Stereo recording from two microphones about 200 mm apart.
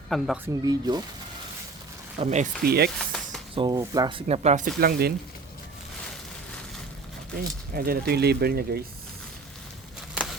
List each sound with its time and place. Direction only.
0.1 s speech: centre (ahead or behind)
0.4 s speech: 20° right (ahead or behind)
2.1 s speech: 35° right (ahead or behind)
2.6 s speech: 55° right (ahead or behind)
3.0 s a sound: 5° left (ahead or behind)
3.5 s speech: 20° right (ahead or behind)
4.3 s speech: 35° right (ahead or behind)
4.8 s speech: 50° right (ahead or behind)
7.3 s speech: 50° right (ahead or behind)